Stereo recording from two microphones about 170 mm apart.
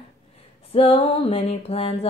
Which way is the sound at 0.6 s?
35° left (ahead or behind).